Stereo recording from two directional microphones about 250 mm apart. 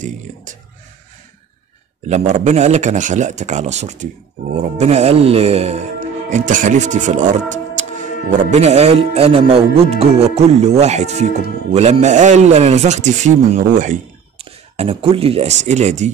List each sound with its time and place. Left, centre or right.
2.0 s speech: right